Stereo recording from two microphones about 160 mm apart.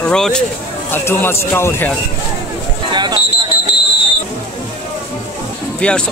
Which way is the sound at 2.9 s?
25° right (ahead or behind).